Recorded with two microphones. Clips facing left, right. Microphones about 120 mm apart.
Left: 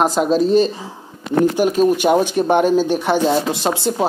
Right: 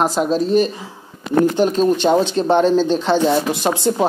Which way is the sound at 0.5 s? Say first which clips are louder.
Left 1 dB; 25° left (ahead or behind).